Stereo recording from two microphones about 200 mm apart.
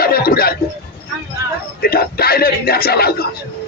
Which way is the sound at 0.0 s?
45° left (ahead or behind).